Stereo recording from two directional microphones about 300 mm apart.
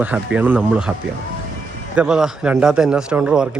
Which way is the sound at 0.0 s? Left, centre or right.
Centre.